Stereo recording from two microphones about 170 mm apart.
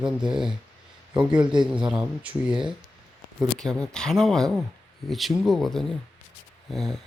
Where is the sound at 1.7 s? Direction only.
5° right (ahead or behind).